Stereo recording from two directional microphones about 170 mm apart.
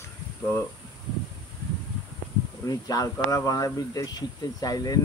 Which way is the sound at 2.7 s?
20° left (ahead or behind).